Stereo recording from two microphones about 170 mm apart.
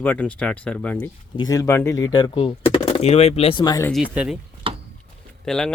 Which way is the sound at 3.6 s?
20° left (ahead or behind).